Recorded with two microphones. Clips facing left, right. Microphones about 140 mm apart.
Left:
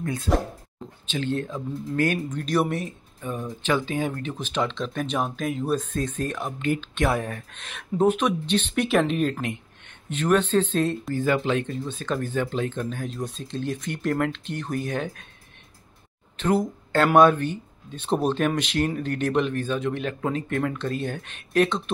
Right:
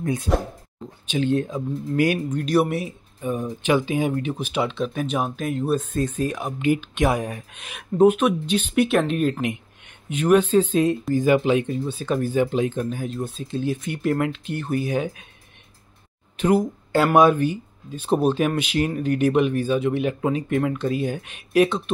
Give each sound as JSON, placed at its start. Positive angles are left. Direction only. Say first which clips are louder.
{"t": 0.0, "sound": "speech", "louder": "right 2 dB", "side_deg": -20}
{"t": 9.4, "sound": "speech", "louder": "right 4 dB", "side_deg": -15}
{"t": 16.3, "sound": "speech", "louder": "right 3 dB", "side_deg": -10}